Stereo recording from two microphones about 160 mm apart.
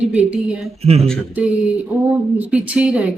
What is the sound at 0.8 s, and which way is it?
Speech, 40° right (ahead or behind).